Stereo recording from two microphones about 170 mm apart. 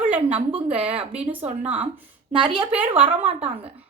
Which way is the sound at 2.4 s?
30° right (ahead or behind).